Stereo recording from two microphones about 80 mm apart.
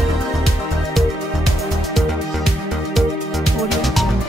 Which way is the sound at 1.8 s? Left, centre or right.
Centre.